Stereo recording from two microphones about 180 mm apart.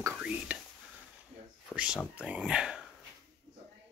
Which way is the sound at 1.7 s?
5° right (ahead or behind).